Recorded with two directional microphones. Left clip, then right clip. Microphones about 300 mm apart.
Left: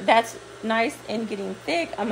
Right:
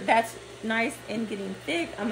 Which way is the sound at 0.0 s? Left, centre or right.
Left.